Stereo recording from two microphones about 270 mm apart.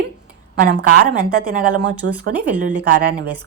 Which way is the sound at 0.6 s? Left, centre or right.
Right.